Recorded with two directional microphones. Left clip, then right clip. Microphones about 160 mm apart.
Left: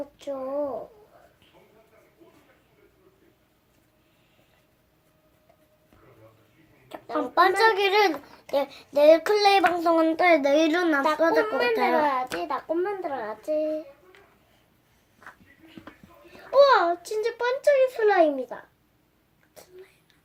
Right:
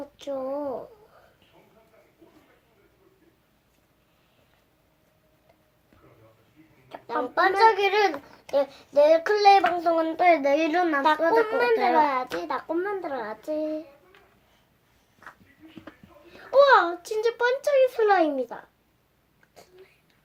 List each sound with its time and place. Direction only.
0.2 s a child's voice: 35° right (ahead or behind)
7.3 s speech: 40° left (ahead or behind)
11.4 s a child's voice: 35° right (ahead or behind)
16.5 s a child's voice: 30° right (ahead or behind)